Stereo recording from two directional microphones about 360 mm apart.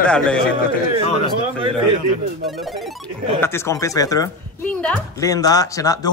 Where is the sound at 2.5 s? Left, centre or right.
Centre.